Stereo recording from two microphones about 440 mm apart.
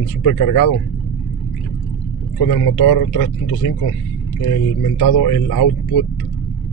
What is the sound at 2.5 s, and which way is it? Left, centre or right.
Speech, left.